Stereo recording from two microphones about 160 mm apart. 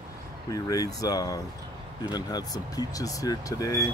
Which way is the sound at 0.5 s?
20° left (ahead or behind).